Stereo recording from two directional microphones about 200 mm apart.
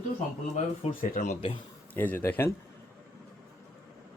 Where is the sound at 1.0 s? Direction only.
40° left (ahead or behind).